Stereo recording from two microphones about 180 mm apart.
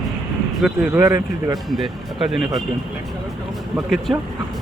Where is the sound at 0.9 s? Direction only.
15° right (ahead or behind).